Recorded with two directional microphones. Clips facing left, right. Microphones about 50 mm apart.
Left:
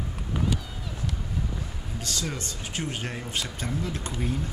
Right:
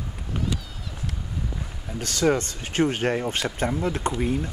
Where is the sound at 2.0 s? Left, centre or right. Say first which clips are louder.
Right 11 dB; right.